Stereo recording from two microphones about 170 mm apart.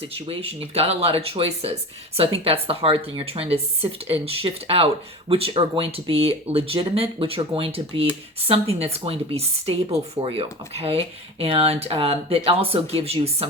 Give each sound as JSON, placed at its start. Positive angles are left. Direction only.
{"t": 0.3, "sound": "speech", "side_deg": -35}